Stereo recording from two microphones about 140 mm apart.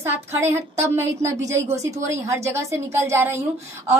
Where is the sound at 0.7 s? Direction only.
20° right (ahead or behind).